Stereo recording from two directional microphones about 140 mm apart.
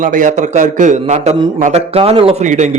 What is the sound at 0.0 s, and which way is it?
A man's voice, 65° right (ahead or behind).